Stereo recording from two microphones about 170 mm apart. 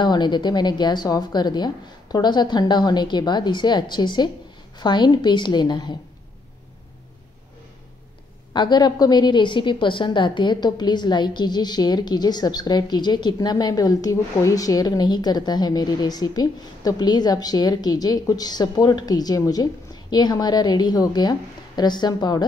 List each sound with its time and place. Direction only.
0.0 s a woman's voice: 25° left (ahead or behind)
8.5 s a woman's voice: 25° left (ahead or behind)